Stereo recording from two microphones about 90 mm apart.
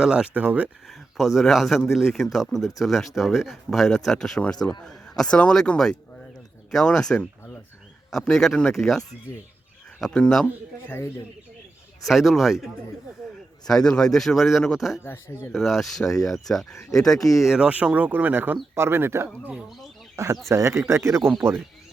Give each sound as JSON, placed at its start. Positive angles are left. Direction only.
{"t": 0.0, "sound": "speech", "side_deg": -10}
{"t": 0.9, "sound": "speech", "side_deg": 0}
{"t": 10.8, "sound": "speech", "side_deg": 30}
{"t": 12.0, "sound": "speech", "side_deg": 0}
{"t": 15.0, "sound": "speech", "side_deg": 30}
{"t": 15.5, "sound": "speech", "side_deg": 0}